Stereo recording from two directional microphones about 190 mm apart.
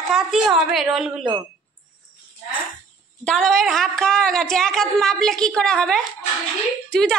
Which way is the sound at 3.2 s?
Centre (ahead or behind).